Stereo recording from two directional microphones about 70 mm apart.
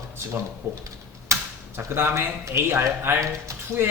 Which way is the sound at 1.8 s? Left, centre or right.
Right.